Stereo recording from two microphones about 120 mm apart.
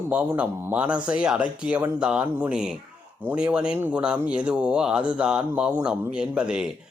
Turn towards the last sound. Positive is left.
turn(degrees=-5)  # may be behind; listen again after turning